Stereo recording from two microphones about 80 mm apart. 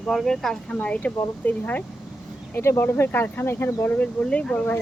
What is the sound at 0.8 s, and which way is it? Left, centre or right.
Speech, centre.